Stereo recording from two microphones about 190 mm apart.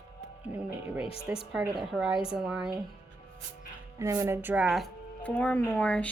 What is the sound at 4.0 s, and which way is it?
Speech, 15° right (ahead or behind).